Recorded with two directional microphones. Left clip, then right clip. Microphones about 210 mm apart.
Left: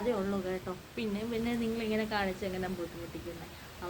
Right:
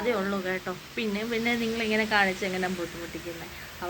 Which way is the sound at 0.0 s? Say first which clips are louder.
Right 5 dB; centre (ahead or behind).